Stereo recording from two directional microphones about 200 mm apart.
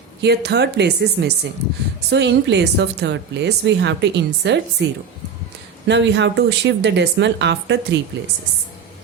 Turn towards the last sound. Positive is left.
turn(degrees=-60)  # may be behind; listen again after turning